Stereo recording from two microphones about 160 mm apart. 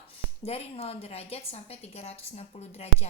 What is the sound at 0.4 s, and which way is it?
A woman's voice, 40° left (ahead or behind).